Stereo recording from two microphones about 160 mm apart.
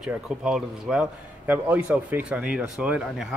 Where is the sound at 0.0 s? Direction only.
5° right (ahead or behind).